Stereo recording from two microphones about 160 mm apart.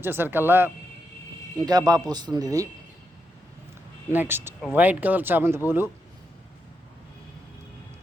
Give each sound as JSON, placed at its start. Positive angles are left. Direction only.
{"t": 0.0, "sound": "speech", "side_deg": -15}
{"t": 1.5, "sound": "speech", "side_deg": -25}
{"t": 4.1, "sound": "speech", "side_deg": -15}